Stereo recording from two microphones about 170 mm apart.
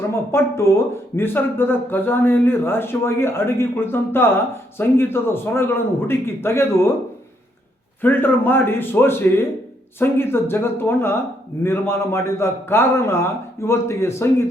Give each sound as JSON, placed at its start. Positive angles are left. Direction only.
{"t": 0.3, "sound": "a man's voice", "side_deg": 15}
{"t": 8.0, "sound": "a man's voice", "side_deg": 10}